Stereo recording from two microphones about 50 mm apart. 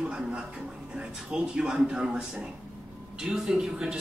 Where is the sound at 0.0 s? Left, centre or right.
Centre.